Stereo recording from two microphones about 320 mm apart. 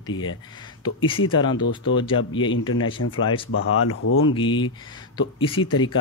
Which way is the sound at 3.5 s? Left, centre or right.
Left.